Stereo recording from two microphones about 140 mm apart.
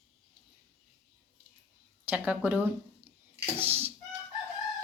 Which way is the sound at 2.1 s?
10° right (ahead or behind).